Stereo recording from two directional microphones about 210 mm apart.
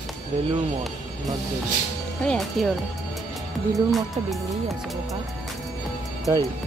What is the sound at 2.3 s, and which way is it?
Speech, centre (ahead or behind).